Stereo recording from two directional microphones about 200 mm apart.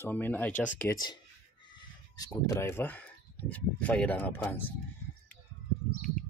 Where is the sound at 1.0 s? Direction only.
25° left (ahead or behind).